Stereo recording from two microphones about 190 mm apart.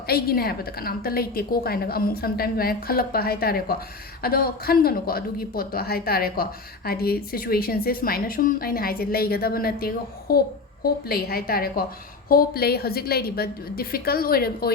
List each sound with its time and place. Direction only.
0.1 s a woman's voice: 55° left (ahead or behind)